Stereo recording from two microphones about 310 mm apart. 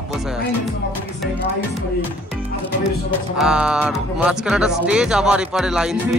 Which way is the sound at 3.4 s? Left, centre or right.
Centre.